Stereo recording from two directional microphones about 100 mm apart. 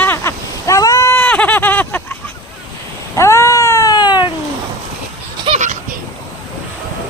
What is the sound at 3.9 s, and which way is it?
Cat, 45° left (ahead or behind).